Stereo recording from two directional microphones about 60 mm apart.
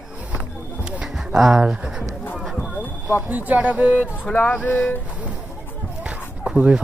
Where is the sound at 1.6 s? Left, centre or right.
Centre.